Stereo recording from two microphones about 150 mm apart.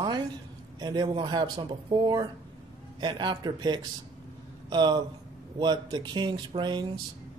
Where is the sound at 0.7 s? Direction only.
30° right (ahead or behind).